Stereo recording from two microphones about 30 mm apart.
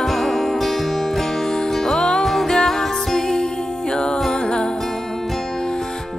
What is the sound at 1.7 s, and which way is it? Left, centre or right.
Music, centre.